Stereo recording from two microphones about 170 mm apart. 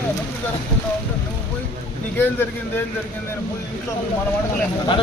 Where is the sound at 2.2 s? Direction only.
10° left (ahead or behind).